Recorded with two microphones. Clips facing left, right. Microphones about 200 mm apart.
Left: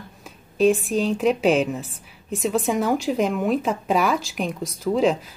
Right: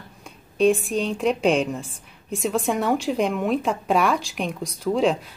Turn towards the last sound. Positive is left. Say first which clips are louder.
# left 1 dB
turn(degrees=0)  # may be behind; listen again after turning